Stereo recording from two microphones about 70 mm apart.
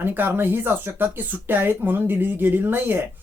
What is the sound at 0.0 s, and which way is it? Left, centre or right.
Speech, right.